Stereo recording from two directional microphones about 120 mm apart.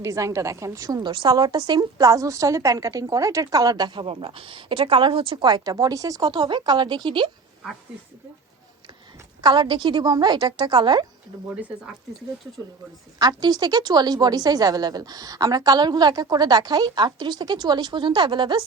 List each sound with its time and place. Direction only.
0.0 s a woman's voice: 25° right (ahead or behind)
4.0 s a woman's voice: 50° right (ahead or behind)
5.5 s a woman's voice: 35° right (ahead or behind)
9.4 s a woman's voice: 40° right (ahead or behind)
13.1 s a woman's voice: 35° right (ahead or behind)